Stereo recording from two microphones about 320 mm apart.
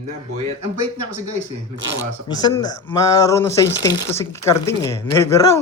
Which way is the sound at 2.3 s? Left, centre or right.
Centre.